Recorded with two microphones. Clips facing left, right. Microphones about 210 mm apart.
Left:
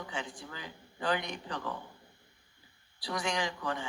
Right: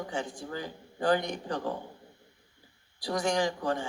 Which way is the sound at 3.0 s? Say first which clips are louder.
Right 6 dB; 45° right (ahead or behind).